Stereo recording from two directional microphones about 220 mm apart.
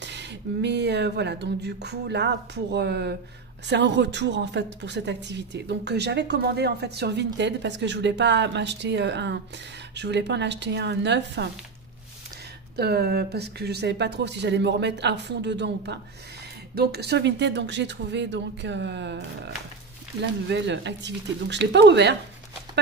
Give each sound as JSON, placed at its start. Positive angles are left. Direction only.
{"t": 0.0, "sound": "a woman's voice", "side_deg": -50}
{"t": 12.7, "sound": "a woman's voice", "side_deg": -45}